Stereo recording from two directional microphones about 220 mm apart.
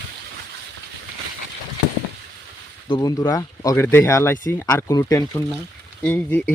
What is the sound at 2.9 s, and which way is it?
Speech, 15° left (ahead or behind).